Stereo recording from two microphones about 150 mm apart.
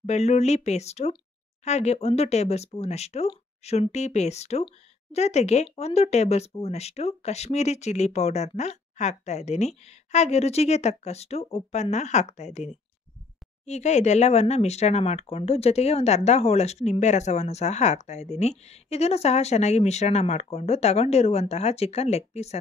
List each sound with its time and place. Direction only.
0.0 s speech: 50° left (ahead or behind)